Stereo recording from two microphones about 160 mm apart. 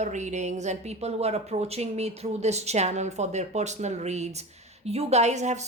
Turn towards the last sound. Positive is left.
turn(degrees=-45)  # may be behind; listen again after turning